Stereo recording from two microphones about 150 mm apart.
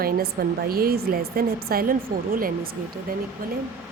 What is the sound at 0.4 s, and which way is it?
Speech, 85° right.